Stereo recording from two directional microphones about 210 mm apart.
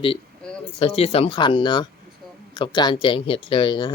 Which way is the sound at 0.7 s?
30° left (ahead or behind).